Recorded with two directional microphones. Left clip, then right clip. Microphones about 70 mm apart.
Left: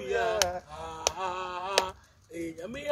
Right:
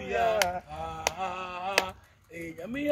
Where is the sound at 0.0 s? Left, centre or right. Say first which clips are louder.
Right 2 dB; left.